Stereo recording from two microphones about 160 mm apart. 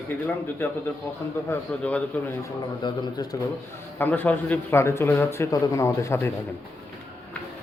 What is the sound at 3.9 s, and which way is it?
Speech, 10° left (ahead or behind).